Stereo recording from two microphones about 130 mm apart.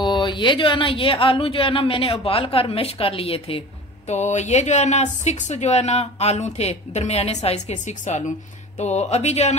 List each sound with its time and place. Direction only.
0.0 s speech: 35° left (ahead or behind)
4.1 s speech: 65° left (ahead or behind)